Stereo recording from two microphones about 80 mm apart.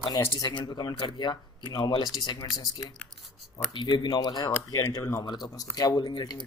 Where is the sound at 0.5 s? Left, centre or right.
Left.